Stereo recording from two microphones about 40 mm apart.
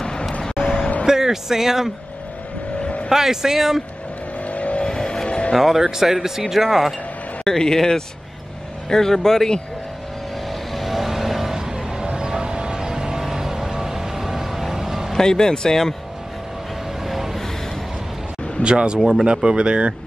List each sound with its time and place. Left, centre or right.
0.0 s vehicle: centre
1.0 s speech: centre
2.8 s vehicle: left
3.1 s speech: centre
4.5 s vehicle: left
4.8 s vehicle: centre
5.6 s speech: centre
7.4 s speech: centre
10.7 s vehicle: centre
15.1 s speech: centre
17.0 s vehicle: centre
18.6 s speech: right
18.9 s speech: centre
19.2 s speech: right